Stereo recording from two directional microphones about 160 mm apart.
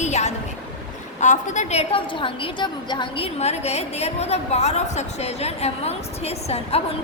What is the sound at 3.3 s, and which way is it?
A woman's voice, 45° left (ahead or behind).